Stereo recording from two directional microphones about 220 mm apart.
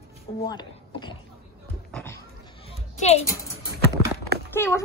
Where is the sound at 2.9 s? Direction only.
30° left (ahead or behind).